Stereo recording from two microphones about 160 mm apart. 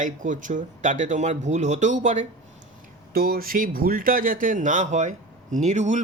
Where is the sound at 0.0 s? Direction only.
55° right (ahead or behind).